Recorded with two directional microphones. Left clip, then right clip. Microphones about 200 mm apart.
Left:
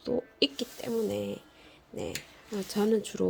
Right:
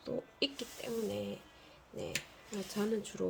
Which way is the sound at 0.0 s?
35° left (ahead or behind).